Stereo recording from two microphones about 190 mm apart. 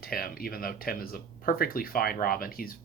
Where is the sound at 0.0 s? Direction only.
50° left (ahead or behind).